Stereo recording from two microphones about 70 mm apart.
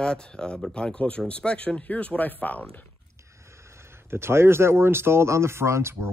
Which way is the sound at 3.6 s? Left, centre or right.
Right.